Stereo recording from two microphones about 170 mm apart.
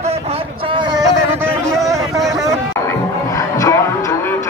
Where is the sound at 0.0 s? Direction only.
35° right (ahead or behind).